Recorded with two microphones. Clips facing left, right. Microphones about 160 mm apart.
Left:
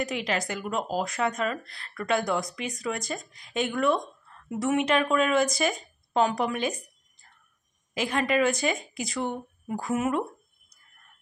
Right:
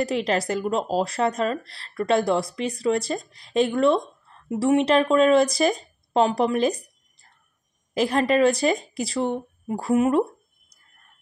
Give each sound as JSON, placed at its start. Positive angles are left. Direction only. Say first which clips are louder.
{"t": 0.0, "sound": "speech", "louder": "right 6 dB", "side_deg": -35}